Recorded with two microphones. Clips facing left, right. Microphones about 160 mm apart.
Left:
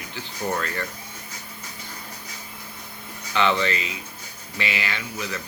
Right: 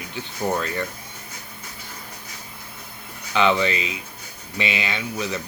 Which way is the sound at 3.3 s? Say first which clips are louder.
Right 2 dB; 15° right (ahead or behind).